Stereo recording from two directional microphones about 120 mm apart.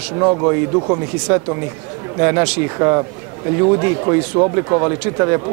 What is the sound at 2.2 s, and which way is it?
Speech, 20° right (ahead or behind).